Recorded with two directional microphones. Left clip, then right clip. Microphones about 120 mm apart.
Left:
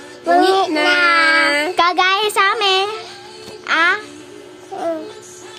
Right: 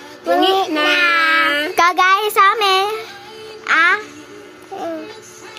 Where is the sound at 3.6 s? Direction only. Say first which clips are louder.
Right 2 dB; 10° left (ahead or behind).